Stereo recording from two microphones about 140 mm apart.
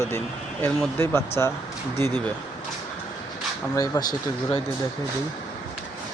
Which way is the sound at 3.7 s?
25° left (ahead or behind).